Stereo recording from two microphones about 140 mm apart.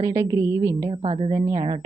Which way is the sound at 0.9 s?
45° right (ahead or behind).